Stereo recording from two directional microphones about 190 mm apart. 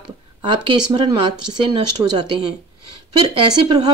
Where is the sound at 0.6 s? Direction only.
25° right (ahead or behind).